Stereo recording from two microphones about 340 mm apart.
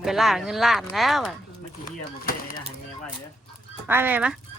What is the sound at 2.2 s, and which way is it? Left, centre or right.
Speech, left.